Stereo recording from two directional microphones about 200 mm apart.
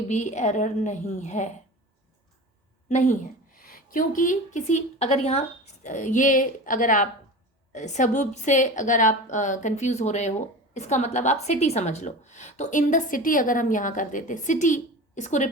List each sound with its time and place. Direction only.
0.1 s a woman's voice: 35° left (ahead or behind)
2.9 s a woman's voice: 35° left (ahead or behind)